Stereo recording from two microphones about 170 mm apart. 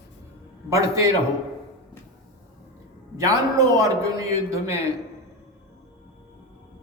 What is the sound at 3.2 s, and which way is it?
A man's voice, 20° right (ahead or behind).